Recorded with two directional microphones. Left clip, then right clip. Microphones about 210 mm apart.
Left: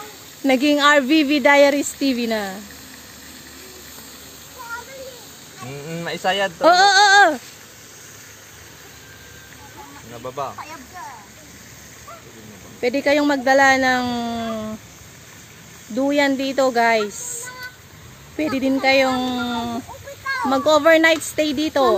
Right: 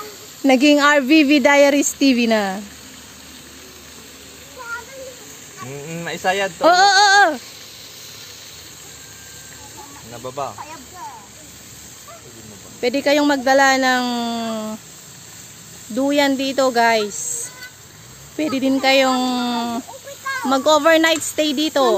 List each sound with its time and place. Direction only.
0.4 s child singing: 20° right (ahead or behind)
5.9 s speech: 30° right (ahead or behind)
6.6 s female singing: 5° right (ahead or behind)
10.2 s speech: 50° right (ahead or behind)
12.8 s speech: 5° right (ahead or behind)
15.9 s speech: 5° right (ahead or behind)
18.3 s speech: 5° right (ahead or behind)